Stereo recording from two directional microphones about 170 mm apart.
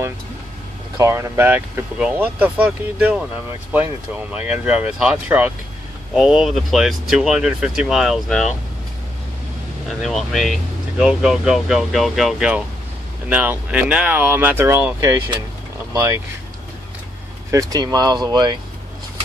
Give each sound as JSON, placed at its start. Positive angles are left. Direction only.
{"t": 0.9, "sound": "speech", "side_deg": -15}
{"t": 9.8, "sound": "speech", "side_deg": 0}
{"t": 17.5, "sound": "speech", "side_deg": -20}